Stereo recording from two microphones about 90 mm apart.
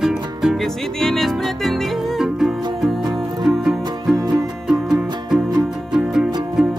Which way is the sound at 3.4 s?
Centre (ahead or behind).